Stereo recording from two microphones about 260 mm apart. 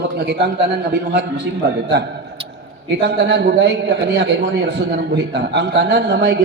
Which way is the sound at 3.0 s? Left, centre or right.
Right.